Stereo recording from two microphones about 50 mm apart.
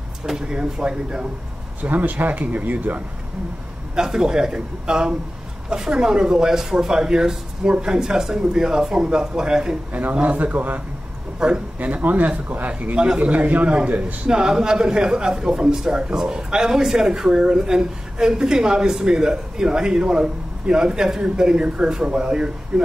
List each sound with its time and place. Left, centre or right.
0.3 s a man's voice: centre
1.8 s speech: right
3.9 s a man's voice: centre
10.2 s speech: right
11.3 s a man's voice: centre
11.8 s speech: right
12.9 s a man's voice: right
14.3 s a man's voice: centre